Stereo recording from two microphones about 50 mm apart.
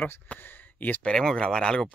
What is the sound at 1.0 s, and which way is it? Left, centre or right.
Speech, centre.